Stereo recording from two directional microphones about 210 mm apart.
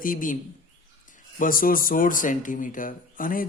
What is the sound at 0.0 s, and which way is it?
Speech, 40° left (ahead or behind).